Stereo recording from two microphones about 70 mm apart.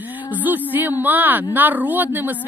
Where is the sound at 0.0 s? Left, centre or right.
Right.